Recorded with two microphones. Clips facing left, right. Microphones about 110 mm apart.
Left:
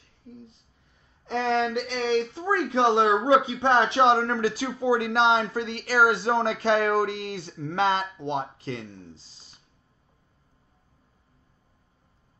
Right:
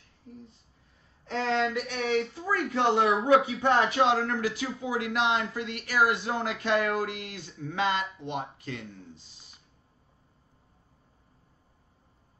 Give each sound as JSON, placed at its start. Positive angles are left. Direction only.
{"t": 1.7, "sound": "speech", "side_deg": 25}